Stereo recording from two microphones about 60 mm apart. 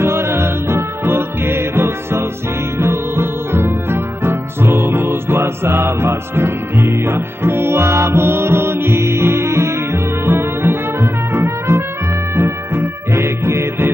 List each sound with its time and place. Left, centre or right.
0.0 s music: right